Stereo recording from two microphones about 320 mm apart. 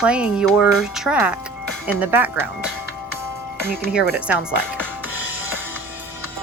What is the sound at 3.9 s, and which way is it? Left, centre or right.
Speech, centre.